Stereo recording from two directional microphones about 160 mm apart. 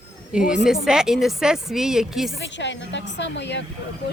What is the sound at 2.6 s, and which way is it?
A woman's voice, 90° left.